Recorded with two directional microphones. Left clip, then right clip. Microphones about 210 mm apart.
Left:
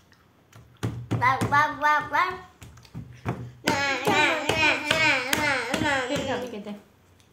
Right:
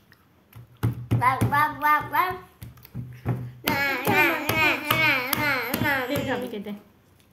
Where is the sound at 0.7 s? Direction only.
15° left (ahead or behind).